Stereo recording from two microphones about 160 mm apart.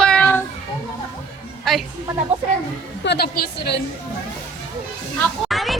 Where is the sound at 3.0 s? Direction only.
85° left.